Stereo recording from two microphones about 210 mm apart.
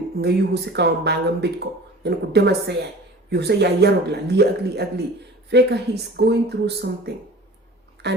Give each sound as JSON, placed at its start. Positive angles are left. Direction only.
{"t": 0.2, "sound": "speech", "side_deg": -50}